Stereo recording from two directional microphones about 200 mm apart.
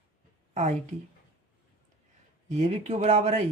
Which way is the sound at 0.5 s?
35° right (ahead or behind).